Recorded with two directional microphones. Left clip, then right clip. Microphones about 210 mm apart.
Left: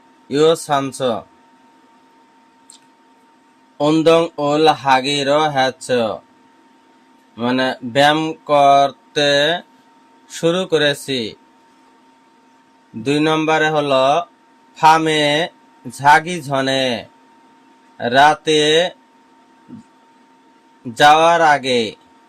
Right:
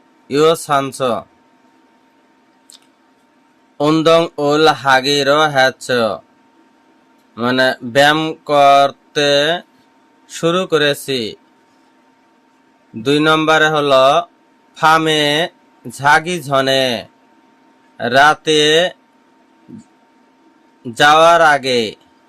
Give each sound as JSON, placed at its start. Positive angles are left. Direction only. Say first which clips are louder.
{"t": 0.3, "sound": "speech", "louder": "right 2 dB", "side_deg": -15}
{"t": 3.8, "sound": "mantra", "louder": "right 1 dB", "side_deg": -25}
{"t": 7.3, "sound": "mantra", "louder": "right 4 dB", "side_deg": -25}
{"t": 10.2, "sound": "speech", "louder": "right 2 dB", "side_deg": -15}
{"t": 13.0, "sound": "mantra", "louder": "right 4 dB", "side_deg": -20}
{"t": 14.8, "sound": "speech", "louder": "even", "side_deg": -20}
{"t": 20.9, "sound": "speech", "louder": "right 2 dB", "side_deg": -15}